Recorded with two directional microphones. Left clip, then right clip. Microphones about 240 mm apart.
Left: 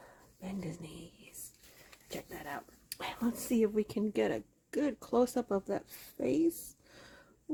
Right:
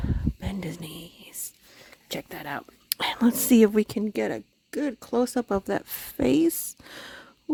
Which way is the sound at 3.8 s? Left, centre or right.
Right.